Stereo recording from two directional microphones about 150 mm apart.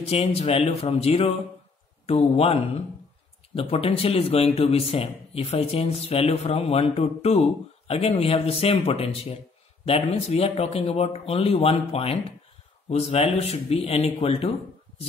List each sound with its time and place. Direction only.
0.0 s a man's voice: 45° left (ahead or behind)